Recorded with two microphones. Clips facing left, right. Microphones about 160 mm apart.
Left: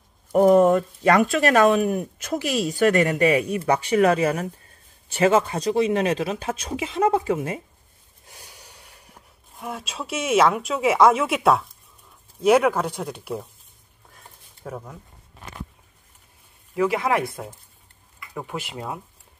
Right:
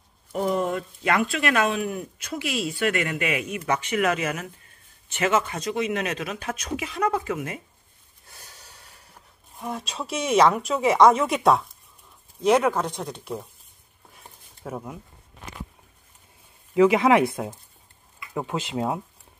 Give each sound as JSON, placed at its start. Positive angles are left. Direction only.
{"t": 0.3, "sound": "speech", "side_deg": 45}
{"t": 8.3, "sound": "gasp", "side_deg": 15}
{"t": 9.6, "sound": "speech", "side_deg": 0}
{"t": 14.1, "sound": "a sound", "side_deg": -5}
{"t": 16.7, "sound": "speech", "side_deg": -20}